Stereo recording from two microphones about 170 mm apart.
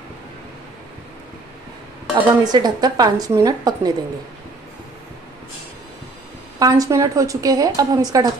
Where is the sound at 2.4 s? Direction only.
25° right (ahead or behind).